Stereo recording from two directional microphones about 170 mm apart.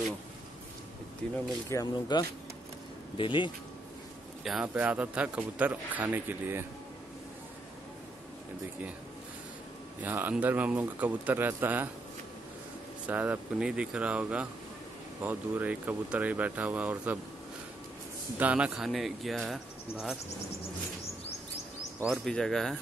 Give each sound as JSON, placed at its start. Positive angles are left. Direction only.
{"t": 1.3, "sound": "speech", "side_deg": 20}
{"t": 4.5, "sound": "a man's voice", "side_deg": -5}
{"t": 10.0, "sound": "a man's voice", "side_deg": -10}
{"t": 13.0, "sound": "a man's voice", "side_deg": -10}
{"t": 18.4, "sound": "speech", "side_deg": -10}
{"t": 22.0, "sound": "speech", "side_deg": 0}